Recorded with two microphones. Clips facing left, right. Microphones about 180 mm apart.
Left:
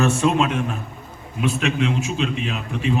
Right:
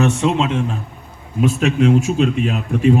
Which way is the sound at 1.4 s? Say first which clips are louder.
Right 6 dB; 45° right (ahead or behind).